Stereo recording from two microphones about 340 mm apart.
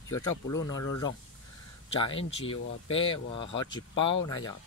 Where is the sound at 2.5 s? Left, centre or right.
Centre.